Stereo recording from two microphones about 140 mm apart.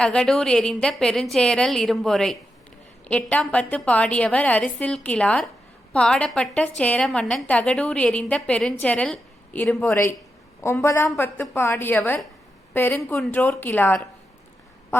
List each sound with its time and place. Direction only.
0.0 s a woman's voice: 5° left (ahead or behind)